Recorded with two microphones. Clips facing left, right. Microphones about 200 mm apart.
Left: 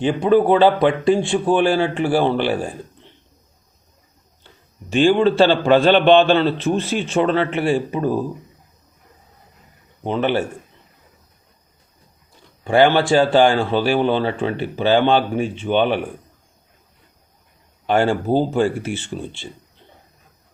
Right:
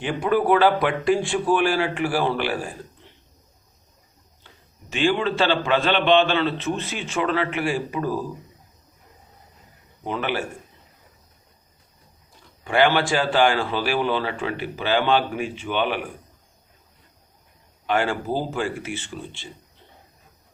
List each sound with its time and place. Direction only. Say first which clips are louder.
0.0 s a man's voice: left 6 dB; 25° left (ahead or behind)
4.9 s a man's voice: left 7 dB; 30° left (ahead or behind)
10.0 s a man's voice: left 7 dB; 25° left (ahead or behind)
12.6 s a man's voice: left 5 dB; 30° left (ahead or behind)
17.8 s a man's voice: left 6 dB; 30° left (ahead or behind)